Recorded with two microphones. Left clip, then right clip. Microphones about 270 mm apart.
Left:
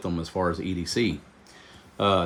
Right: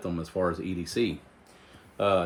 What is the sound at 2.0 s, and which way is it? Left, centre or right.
Speech, left.